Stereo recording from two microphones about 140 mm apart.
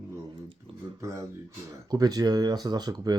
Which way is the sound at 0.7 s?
40° right (ahead or behind).